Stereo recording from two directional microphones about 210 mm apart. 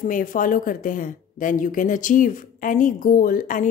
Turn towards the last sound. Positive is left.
turn(degrees=40)  # may be behind; listen again after turning